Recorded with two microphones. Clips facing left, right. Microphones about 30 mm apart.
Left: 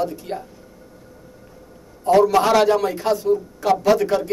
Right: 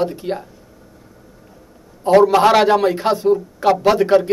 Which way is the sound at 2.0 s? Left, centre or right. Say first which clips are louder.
Right 4 dB; right.